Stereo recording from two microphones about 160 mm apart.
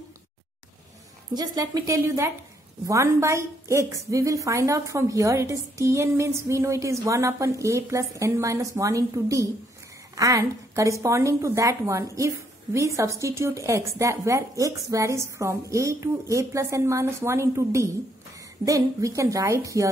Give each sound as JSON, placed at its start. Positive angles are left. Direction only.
{"t": 1.3, "sound": "a woman's voice", "side_deg": -25}